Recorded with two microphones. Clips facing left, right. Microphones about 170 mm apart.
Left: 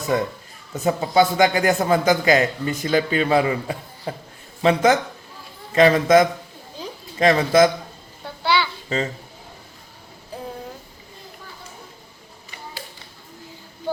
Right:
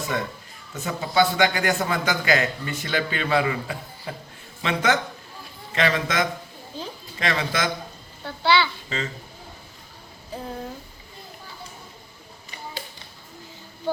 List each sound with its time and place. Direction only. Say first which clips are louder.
0.1 s a man's voice: left 6 dB; 35° left (ahead or behind)
8.2 s a child's voice: right 1 dB; 10° left (ahead or behind)